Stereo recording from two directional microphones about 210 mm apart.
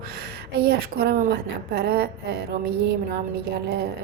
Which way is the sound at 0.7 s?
50° right (ahead or behind).